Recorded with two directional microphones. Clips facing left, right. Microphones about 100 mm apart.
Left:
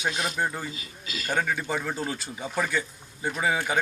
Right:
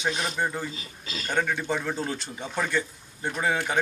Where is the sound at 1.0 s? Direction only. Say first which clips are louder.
Even; 30° right (ahead or behind).